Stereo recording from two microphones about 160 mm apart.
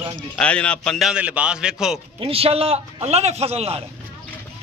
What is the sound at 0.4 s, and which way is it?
A man's voice, 5° left (ahead or behind).